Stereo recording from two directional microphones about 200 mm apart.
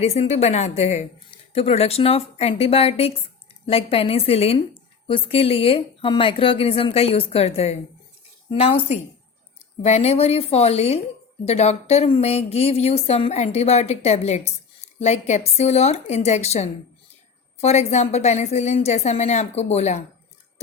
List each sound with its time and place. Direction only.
0.0 s a woman's voice: 30° left (ahead or behind)